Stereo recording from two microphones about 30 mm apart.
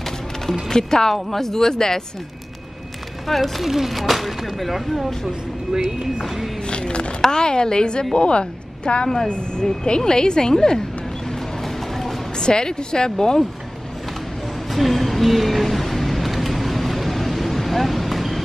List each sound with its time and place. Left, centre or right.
0.7 s a woman's voice: left
1.1 s speech: centre
3.3 s speech: centre
3.6 s speech: centre
5.7 s speech: centre
6.7 s a sound: left
7.2 s a woman's voice: left
9.0 s a woman's voice: left
11.2 s a sound: centre
12.4 s a woman's voice: left
14.7 s a sound: centre